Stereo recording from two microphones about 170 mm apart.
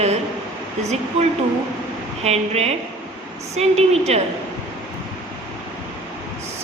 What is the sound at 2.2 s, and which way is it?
A woman's voice, 40° right (ahead or behind).